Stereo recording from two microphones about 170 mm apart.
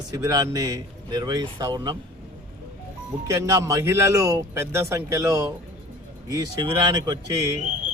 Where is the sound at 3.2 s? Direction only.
15° right (ahead or behind).